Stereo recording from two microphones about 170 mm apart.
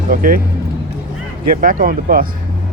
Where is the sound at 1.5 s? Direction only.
60° right (ahead or behind).